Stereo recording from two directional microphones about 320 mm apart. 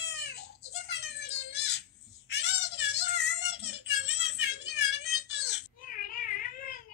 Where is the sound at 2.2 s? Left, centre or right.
Left.